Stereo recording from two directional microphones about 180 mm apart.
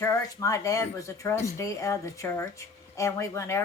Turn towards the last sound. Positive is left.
turn(degrees=15)  # may be behind; listen again after turning